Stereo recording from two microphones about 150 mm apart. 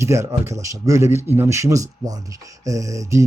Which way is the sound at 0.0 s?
20° right (ahead or behind).